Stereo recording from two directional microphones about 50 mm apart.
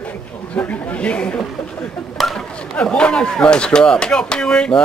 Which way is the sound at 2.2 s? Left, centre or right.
Centre.